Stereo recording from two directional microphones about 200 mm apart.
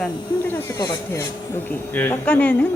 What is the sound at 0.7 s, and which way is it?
Speech, 20° left (ahead or behind).